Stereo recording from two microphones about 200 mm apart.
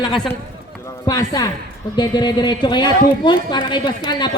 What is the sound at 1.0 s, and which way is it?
Speech, 15° left (ahead or behind).